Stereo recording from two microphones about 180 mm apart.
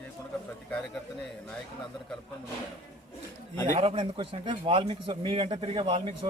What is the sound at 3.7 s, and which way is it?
A man's voice, 30° right (ahead or behind).